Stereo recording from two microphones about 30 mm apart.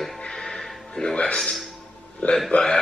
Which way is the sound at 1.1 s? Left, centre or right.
Left.